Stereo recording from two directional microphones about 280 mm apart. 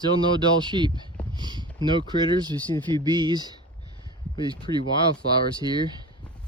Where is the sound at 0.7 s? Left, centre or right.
Centre.